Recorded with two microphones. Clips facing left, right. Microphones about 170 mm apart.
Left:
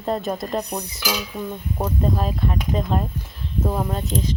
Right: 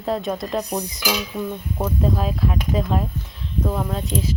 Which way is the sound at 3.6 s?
15° left (ahead or behind).